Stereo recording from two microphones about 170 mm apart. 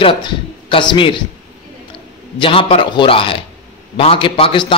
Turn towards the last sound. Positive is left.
turn(degrees=30)  # may be behind; listen again after turning